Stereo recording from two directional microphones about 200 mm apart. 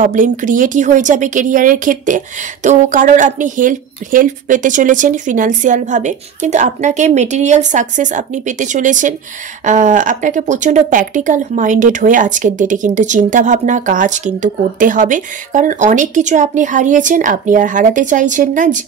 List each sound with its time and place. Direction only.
0.0 s speech: 40° right (ahead or behind)